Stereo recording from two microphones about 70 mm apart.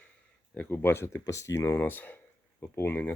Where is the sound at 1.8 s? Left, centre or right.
Left.